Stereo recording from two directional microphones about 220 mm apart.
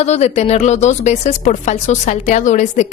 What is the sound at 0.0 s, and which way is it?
Speech, 30° left (ahead or behind).